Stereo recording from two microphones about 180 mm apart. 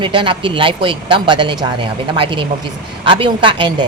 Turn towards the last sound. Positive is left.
turn(degrees=-25)  # may be behind; listen again after turning